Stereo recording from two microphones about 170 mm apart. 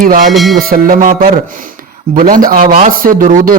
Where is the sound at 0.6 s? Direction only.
60° right (ahead or behind).